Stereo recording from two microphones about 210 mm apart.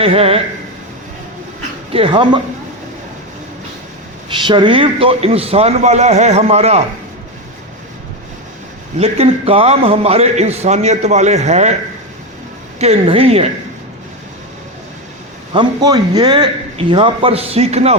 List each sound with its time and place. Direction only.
0.0 s a man's voice: 25° right (ahead or behind)
1.9 s a man's voice: 25° right (ahead or behind)
4.3 s a man's voice: 25° right (ahead or behind)
9.0 s a man's voice: 30° right (ahead or behind)
12.8 s a man's voice: 30° right (ahead or behind)
15.5 s a man's voice: 20° right (ahead or behind)